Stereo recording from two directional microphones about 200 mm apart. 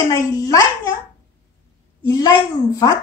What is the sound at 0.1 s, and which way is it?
Speech, 15° left (ahead or behind).